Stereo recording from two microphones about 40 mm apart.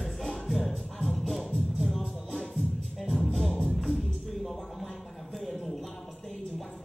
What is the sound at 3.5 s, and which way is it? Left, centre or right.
Music, left.